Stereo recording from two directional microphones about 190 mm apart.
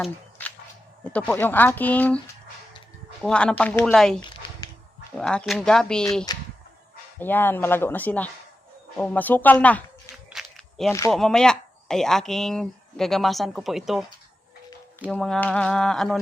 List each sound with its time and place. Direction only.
1.3 s speech: 10° left (ahead or behind)
3.2 s speech: 5° left (ahead or behind)
6.3 s a sound: 20° left (ahead or behind)
7.2 s speech: 10° left (ahead or behind)
10.3 s walk: centre (ahead or behind)
11.1 s speech: centre (ahead or behind)
15.1 s speech: 5° left (ahead or behind)